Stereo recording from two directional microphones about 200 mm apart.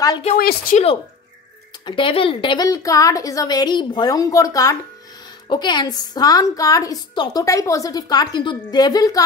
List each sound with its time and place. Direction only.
0.0 s speech: 20° left (ahead or behind)
0.4 s speech: 50° left (ahead or behind)
1.9 s a woman's voice: 25° left (ahead or behind)